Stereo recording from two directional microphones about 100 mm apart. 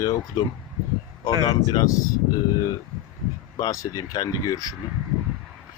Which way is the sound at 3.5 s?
35° left (ahead or behind).